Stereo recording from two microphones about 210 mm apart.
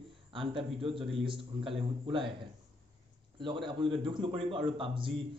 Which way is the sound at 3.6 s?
25° right (ahead or behind).